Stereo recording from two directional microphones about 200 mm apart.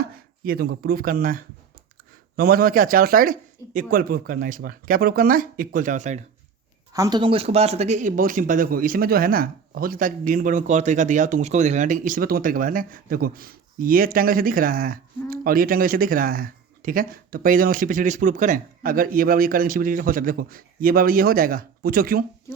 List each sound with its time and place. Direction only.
0.0 s speech: 50° right (ahead or behind)
6.9 s speech: 20° right (ahead or behind); by 22.2 s 45° right (ahead or behind)